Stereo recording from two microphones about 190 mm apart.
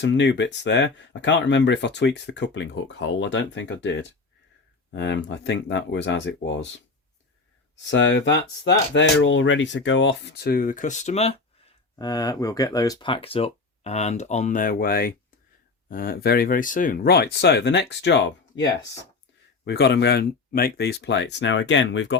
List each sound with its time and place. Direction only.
0.0 s speech: 65° left (ahead or behind); by 11.3 s 35° left (ahead or behind)
11.9 s speech: 20° left (ahead or behind); by 18.6 s 70° left (ahead or behind)
19.6 s speech: 60° left (ahead or behind)